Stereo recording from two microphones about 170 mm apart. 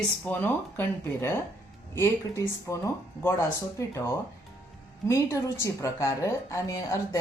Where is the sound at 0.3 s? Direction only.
10° left (ahead or behind).